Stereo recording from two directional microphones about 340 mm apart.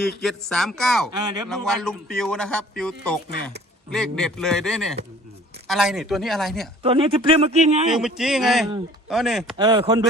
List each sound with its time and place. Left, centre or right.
0.2 s speech: centre
1.1 s a man's voice: centre
1.5 s speech: centre
6.8 s a man's voice: centre
7.9 s speech: centre
9.6 s a man's voice: centre